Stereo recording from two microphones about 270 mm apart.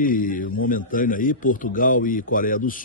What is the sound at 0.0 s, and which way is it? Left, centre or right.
A man's voice, left.